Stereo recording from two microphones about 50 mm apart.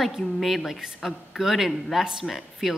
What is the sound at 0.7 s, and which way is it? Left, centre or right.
A woman's voice, centre.